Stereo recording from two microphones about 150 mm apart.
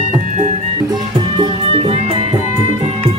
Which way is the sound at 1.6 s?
40° right (ahead or behind).